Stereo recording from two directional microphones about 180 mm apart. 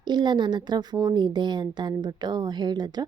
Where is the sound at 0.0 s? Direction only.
25° right (ahead or behind).